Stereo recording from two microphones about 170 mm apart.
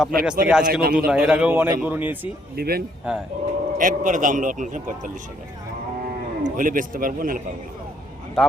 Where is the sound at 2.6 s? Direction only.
65° right (ahead or behind).